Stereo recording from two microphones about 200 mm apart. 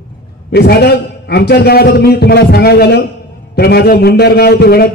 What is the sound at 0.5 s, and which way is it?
A man's voice, 55° left (ahead or behind).